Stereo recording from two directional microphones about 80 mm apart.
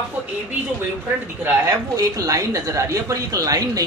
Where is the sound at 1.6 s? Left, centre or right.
Right.